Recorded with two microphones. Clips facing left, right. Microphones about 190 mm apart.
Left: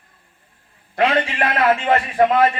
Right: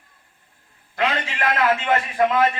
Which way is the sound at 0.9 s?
30° left (ahead or behind).